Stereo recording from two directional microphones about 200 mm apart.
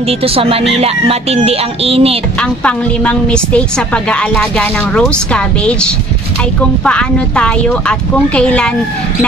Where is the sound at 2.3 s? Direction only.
5° left (ahead or behind).